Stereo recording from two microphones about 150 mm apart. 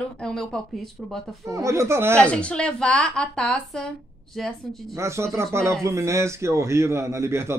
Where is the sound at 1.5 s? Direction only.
20° right (ahead or behind).